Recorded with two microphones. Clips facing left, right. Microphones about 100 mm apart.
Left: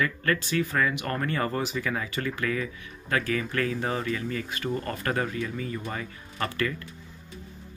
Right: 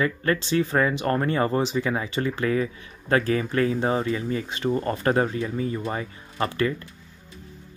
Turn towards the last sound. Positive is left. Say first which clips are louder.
# right 5 dB
turn(degrees=-25)  # may be behind; listen again after turning